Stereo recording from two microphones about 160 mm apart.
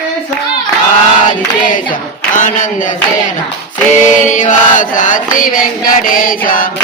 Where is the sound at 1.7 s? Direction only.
55° left (ahead or behind).